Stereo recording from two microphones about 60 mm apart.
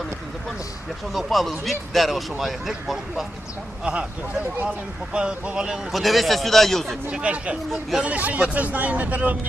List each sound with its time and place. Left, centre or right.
1.1 s speech: centre
5.1 s speech: centre
5.9 s speech: centre
7.1 s speech: centre
7.7 s speech: centre
8.0 s speech: right